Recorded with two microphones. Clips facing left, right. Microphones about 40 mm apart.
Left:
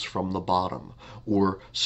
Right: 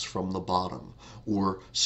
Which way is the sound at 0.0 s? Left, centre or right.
Left.